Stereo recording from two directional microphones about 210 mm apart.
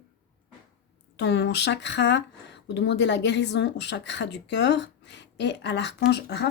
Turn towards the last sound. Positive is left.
turn(degrees=55)  # may be behind; listen again after turning